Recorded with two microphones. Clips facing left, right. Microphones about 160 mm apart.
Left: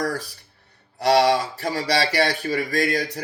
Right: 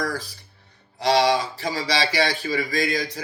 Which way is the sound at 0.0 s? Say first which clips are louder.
Left 2 dB; 60° left (ahead or behind).